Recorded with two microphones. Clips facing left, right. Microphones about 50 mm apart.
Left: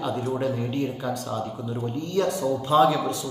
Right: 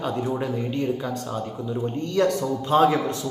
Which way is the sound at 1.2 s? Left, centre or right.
Centre.